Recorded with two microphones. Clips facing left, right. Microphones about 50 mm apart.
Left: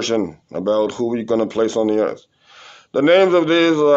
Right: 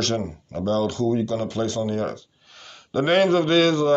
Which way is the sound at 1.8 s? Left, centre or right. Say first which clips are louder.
Left 9 dB; left.